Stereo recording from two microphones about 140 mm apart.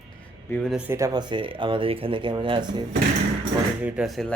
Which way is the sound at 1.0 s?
30° right (ahead or behind).